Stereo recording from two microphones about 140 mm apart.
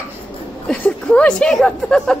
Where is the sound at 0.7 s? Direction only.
5° left (ahead or behind).